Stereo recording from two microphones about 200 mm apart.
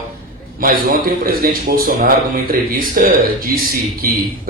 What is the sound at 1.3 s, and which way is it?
Speech, 45° right (ahead or behind).